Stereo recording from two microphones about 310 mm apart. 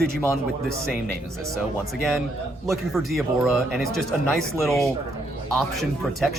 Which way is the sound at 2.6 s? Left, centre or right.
Centre.